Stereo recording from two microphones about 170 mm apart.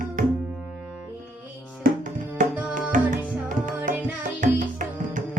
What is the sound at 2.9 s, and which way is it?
Tabla, 50° right (ahead or behind).